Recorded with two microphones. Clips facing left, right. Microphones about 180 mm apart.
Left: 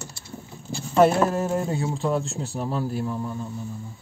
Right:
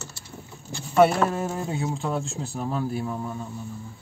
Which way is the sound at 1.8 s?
Centre (ahead or behind).